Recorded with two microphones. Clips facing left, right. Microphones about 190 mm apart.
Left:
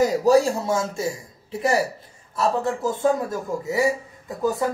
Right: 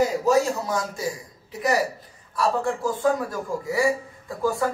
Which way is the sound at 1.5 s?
30° left (ahead or behind).